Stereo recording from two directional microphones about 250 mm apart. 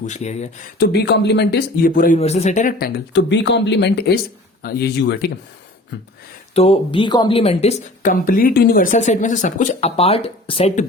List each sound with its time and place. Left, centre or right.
0.0 s speech: left
0.8 s speech: left
6.5 s speech: left